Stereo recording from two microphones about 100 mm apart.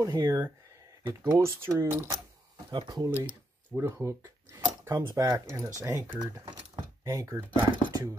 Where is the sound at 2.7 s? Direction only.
50° right (ahead or behind).